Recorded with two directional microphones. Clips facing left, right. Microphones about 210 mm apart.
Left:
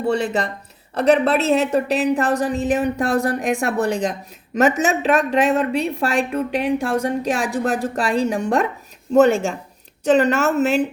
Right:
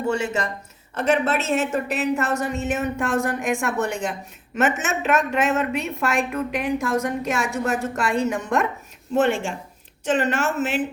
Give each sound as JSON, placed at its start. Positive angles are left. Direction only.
{"t": 0.0, "sound": "a woman's voice", "side_deg": 35}